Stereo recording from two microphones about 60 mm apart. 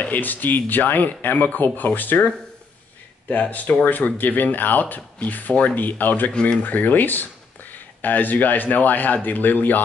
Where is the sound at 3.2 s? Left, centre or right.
Left.